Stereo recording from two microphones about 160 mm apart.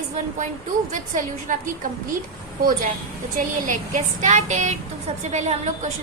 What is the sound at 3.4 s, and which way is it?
A woman's voice, 55° right (ahead or behind).